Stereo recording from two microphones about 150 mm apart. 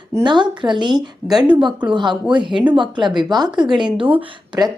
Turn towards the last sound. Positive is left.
turn(degrees=-25)  # may be behind; listen again after turning